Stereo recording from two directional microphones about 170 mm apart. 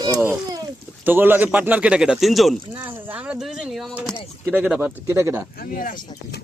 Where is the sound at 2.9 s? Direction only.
10° right (ahead or behind).